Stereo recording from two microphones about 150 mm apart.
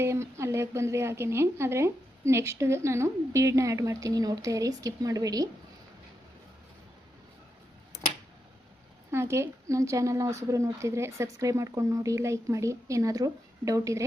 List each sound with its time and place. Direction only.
0.0 s a woman's voice: 20° right (ahead or behind)
9.1 s a woman's voice: 20° right (ahead or behind)